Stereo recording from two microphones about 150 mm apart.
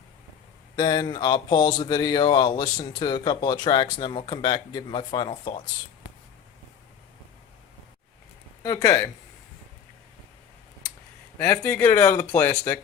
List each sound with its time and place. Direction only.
0.8 s speech: 25° left (ahead or behind)
8.6 s speech: 25° left (ahead or behind)
11.6 s speech: 15° left (ahead or behind)